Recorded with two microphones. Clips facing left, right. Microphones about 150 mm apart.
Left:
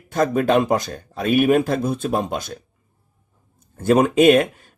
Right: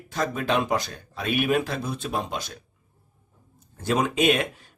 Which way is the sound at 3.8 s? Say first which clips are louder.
Left 8 dB; 50° left (ahead or behind).